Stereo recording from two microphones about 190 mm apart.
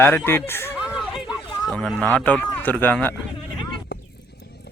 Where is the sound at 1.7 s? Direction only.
5° left (ahead or behind).